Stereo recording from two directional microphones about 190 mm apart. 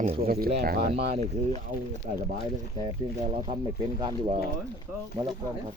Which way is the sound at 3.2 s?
30° right (ahead or behind).